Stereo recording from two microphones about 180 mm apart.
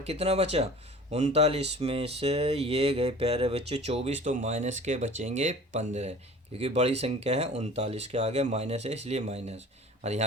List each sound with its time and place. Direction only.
0.0 s speech: 35° right (ahead or behind)